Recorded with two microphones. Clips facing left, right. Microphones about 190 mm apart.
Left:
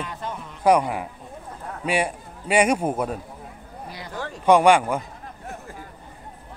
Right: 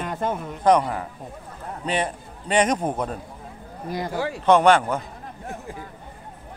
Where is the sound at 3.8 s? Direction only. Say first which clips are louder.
Right 12 dB; 45° right (ahead or behind).